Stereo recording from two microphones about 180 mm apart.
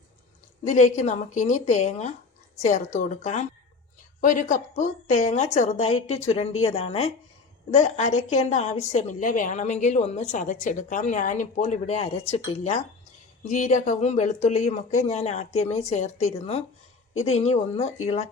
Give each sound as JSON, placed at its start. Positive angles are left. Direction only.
{"t": 0.6, "sound": "a woman's voice", "side_deg": 40}